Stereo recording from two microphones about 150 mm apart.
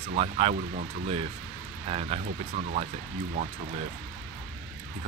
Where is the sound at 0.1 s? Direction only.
45° right (ahead or behind).